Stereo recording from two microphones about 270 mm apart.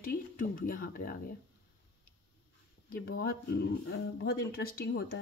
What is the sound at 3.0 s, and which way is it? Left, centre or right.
Speech, left.